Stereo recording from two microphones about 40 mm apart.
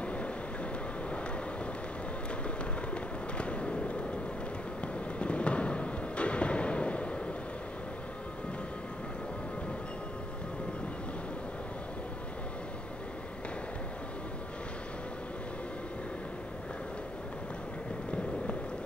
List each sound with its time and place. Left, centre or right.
0.0 s vehicle: left
2.9 s fireworks: left
5.2 s a sound: left